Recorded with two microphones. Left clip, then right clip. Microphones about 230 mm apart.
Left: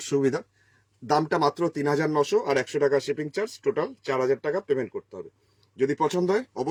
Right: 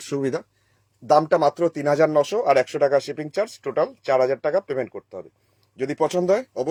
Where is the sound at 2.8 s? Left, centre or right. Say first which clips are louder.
Right 4 dB; right.